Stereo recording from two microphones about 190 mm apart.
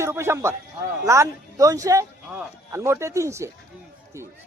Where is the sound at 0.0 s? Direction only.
15° right (ahead or behind).